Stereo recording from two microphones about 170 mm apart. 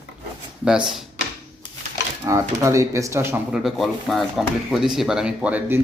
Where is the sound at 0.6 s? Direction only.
5° right (ahead or behind).